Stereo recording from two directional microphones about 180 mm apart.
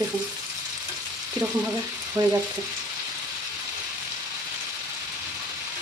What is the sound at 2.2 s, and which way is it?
Frying, 20° right (ahead or behind).